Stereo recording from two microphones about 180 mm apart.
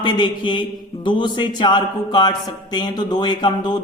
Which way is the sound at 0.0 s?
25° left (ahead or behind).